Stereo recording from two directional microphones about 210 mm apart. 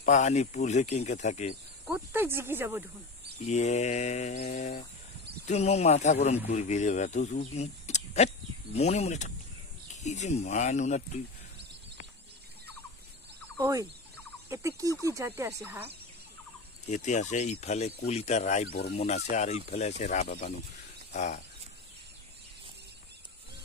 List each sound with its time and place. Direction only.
0.0 s a man's voice: 35° left (ahead or behind)
1.9 s speech: 10° right (ahead or behind)
3.3 s a man's voice: 35° left (ahead or behind)
13.6 s fowl: 15° right (ahead or behind)
14.5 s speech: 15° right (ahead or behind)
16.9 s a man's voice: 35° left (ahead or behind)